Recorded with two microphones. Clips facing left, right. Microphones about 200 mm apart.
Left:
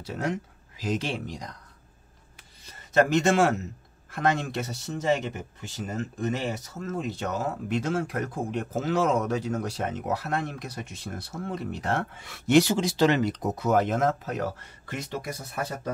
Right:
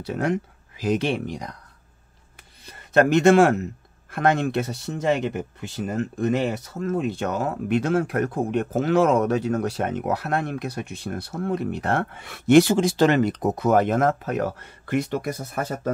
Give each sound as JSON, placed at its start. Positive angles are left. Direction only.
{"t": 0.0, "sound": "speech", "side_deg": -60}
{"t": 2.6, "sound": "a man's voice", "side_deg": -60}